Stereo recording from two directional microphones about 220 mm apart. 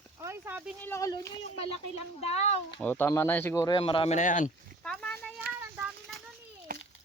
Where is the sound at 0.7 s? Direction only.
10° left (ahead or behind).